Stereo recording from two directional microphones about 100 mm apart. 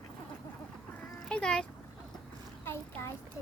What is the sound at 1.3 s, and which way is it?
Speech, 10° left (ahead or behind).